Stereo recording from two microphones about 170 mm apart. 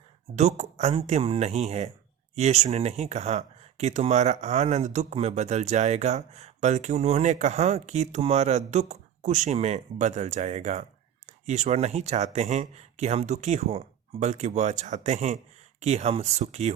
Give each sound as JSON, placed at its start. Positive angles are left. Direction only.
{"t": 0.3, "sound": "speech", "side_deg": -40}